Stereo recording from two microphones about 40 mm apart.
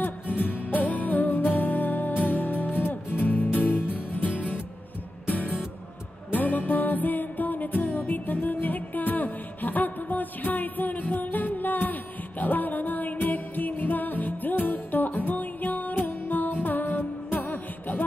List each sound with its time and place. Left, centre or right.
0.7 s music: left